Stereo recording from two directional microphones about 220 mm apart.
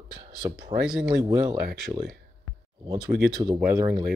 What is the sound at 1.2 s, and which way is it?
Speech, 15° right (ahead or behind).